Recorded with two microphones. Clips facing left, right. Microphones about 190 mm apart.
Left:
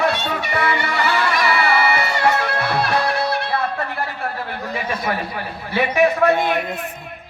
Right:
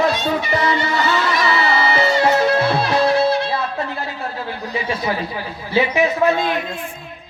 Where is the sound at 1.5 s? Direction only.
20° right (ahead or behind).